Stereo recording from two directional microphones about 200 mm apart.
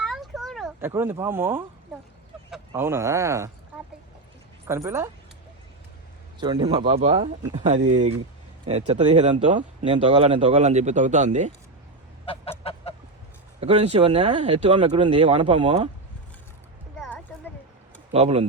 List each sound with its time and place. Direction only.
0.0 s a sound: centre (ahead or behind)
0.8 s speech: 10° right (ahead or behind)
3.7 s a sound: 10° right (ahead or behind)
4.6 s speech: 15° right (ahead or behind)
6.4 s speech: 20° right (ahead or behind); by 11.5 s 35° right (ahead or behind)
12.2 s fowl: 30° left (ahead or behind)
13.6 s speech: 30° right (ahead or behind)
17.0 s a sound: 10° left (ahead or behind)
18.1 s speech: 30° right (ahead or behind)